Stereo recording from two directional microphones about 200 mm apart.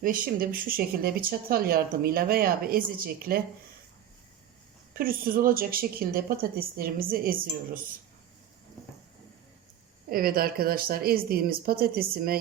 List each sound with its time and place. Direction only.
0.0 s speech: 45° right (ahead or behind)
4.9 s speech: 45° right (ahead or behind)
10.1 s speech: 45° right (ahead or behind)